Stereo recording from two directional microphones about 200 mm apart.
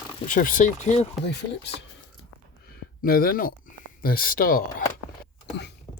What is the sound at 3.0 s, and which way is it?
Speech, 45° left (ahead or behind).